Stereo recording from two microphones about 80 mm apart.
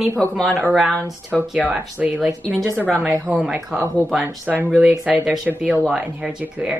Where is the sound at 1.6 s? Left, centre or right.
Centre.